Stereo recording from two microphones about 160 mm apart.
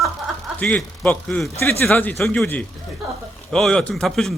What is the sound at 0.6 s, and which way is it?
Speech, 5° left (ahead or behind).